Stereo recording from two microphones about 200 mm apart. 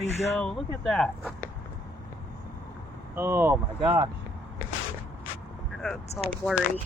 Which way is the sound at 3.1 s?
10° right (ahead or behind).